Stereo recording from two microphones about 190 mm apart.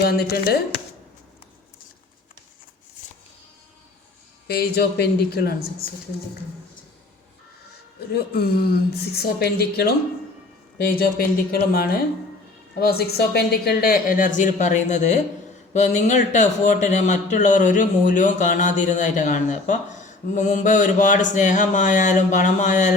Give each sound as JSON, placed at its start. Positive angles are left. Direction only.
{"t": 0.0, "sound": "speech", "side_deg": 55}
{"t": 4.4, "sound": "speech", "side_deg": 55}
{"t": 8.1, "sound": "speech", "side_deg": 55}